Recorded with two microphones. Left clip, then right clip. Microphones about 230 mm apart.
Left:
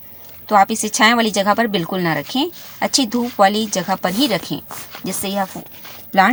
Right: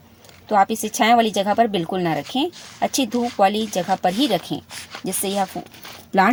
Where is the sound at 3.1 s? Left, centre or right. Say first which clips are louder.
Left 1 dB; centre.